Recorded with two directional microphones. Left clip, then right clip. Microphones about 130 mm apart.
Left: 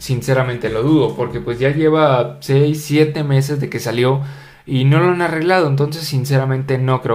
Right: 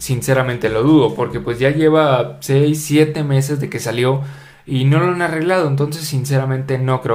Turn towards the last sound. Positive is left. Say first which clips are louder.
# left 1 dB
turn(degrees=0)  # may be behind; listen again after turning